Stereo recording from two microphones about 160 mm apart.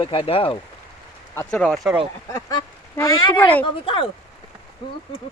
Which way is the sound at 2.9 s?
25° left (ahead or behind).